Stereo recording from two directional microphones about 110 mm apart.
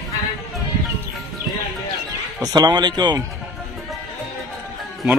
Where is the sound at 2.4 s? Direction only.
35° right (ahead or behind).